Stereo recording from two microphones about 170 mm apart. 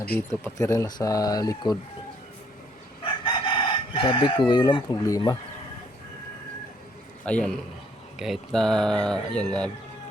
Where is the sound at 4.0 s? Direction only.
30° left (ahead or behind).